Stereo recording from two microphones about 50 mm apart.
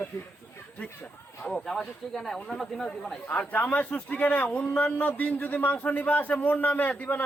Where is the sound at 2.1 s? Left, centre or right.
Centre.